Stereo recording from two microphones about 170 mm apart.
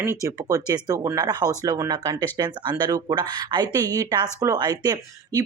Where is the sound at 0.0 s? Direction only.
15° right (ahead or behind).